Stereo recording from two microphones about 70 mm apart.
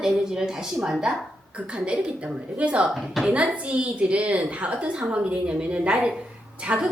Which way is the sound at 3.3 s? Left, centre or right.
Centre.